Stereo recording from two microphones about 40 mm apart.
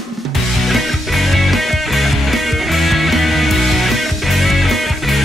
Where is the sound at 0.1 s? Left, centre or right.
Centre.